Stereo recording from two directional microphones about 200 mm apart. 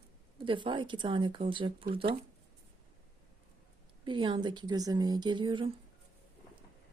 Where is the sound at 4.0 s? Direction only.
25° right (ahead or behind).